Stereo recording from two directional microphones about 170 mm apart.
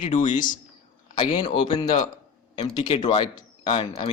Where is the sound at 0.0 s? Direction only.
45° left (ahead or behind).